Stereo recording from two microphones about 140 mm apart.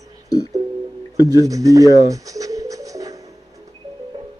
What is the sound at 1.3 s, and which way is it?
Pigeon, 25° right (ahead or behind).